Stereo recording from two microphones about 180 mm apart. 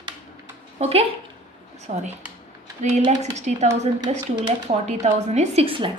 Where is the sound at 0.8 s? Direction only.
35° right (ahead or behind).